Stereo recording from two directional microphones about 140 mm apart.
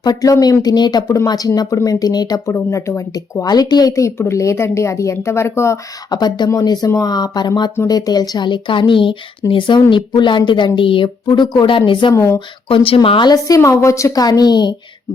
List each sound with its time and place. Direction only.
0.0 s speech: 25° left (ahead or behind)